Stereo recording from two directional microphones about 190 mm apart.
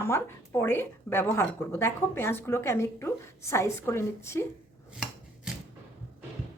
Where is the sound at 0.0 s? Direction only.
15° left (ahead or behind).